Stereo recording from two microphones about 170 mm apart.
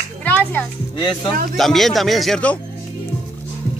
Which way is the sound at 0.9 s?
25° left (ahead or behind).